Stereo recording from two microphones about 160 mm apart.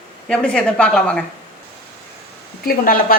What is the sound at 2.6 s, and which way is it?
Speech, 65° left (ahead or behind).